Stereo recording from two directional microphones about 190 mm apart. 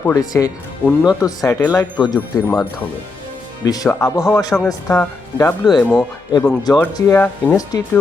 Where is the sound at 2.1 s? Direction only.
10° left (ahead or behind).